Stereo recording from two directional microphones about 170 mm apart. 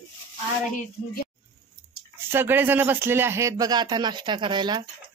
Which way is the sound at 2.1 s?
15° right (ahead or behind).